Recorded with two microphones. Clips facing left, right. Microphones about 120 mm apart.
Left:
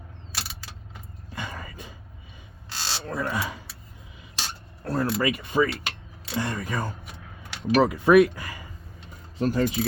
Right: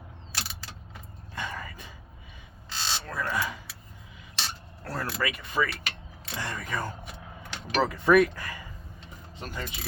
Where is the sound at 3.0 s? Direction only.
20° left (ahead or behind).